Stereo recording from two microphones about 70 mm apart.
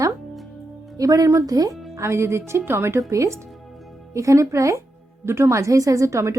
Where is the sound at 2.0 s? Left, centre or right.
Right.